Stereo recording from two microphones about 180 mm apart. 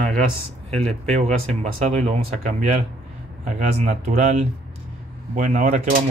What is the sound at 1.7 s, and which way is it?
Speech, 40° right (ahead or behind).